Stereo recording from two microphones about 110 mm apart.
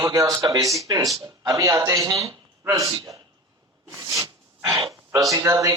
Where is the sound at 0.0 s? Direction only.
35° right (ahead or behind).